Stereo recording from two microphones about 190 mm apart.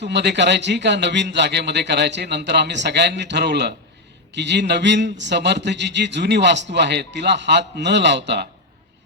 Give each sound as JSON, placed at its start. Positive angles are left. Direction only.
{"t": 0.0, "sound": "a man's voice", "side_deg": -65}